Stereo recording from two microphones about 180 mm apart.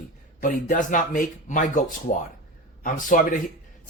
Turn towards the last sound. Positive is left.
turn(degrees=45)  # may be behind; listen again after turning